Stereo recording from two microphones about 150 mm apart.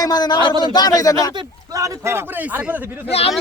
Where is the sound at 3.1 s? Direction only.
40° left (ahead or behind).